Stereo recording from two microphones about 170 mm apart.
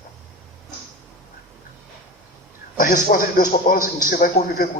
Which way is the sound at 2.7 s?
55° left (ahead or behind).